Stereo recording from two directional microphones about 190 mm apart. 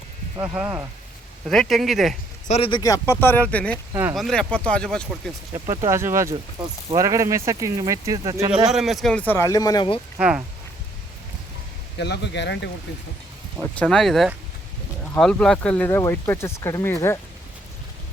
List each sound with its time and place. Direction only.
0.3 s speech: 10° right (ahead or behind)
1.5 s speech: centre (ahead or behind)
2.5 s speech: 25° left (ahead or behind); by 5.3 s 5° left (ahead or behind)
5.6 s speech: 20° right (ahead or behind)
8.7 s speech: centre (ahead or behind); by 10.0 s 25° left (ahead or behind)
10.2 s speech: 5° right (ahead or behind)
11.9 s speech: 60° left (ahead or behind)
13.6 s speech: 5° left (ahead or behind)